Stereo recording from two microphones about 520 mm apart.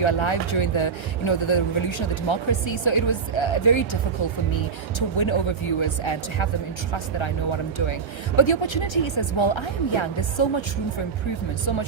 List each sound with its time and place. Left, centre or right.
0.0 s speech: left
4.9 s speech: left
8.4 s speech: left